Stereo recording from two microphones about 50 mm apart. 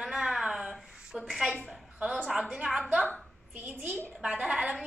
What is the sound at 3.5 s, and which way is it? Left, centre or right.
Speech, right.